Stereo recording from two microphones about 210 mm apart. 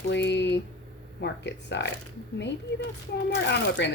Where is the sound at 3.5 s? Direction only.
55° left (ahead or behind).